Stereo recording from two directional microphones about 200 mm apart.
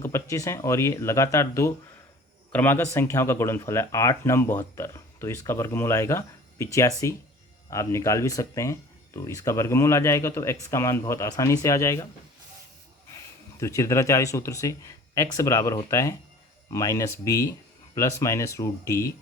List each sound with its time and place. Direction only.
0.0 s speech: 15° left (ahead or behind)
13.6 s speech: 15° left (ahead or behind)